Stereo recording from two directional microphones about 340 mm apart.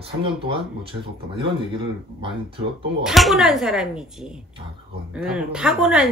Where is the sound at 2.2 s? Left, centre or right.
Centre.